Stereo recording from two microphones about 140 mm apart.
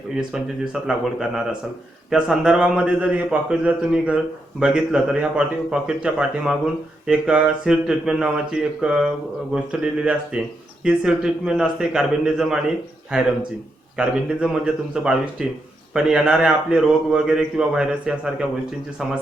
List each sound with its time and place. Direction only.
0.2 s speech: 5° right (ahead or behind)